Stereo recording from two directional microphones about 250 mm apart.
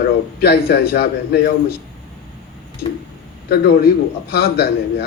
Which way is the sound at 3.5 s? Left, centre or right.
Left.